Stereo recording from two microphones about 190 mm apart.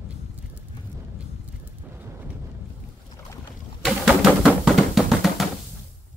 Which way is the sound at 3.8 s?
Centre (ahead or behind).